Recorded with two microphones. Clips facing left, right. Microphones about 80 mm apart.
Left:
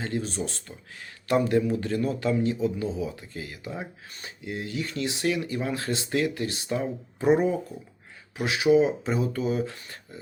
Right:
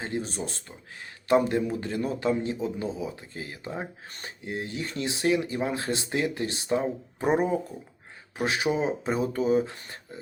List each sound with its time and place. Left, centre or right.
0.0 s speech: right